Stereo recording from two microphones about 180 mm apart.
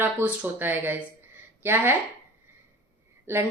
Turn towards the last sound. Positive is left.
turn(degrees=-15)  # may be behind; listen again after turning